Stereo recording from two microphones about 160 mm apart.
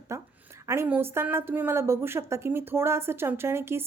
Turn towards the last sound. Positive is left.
turn(degrees=-15)  # may be behind; listen again after turning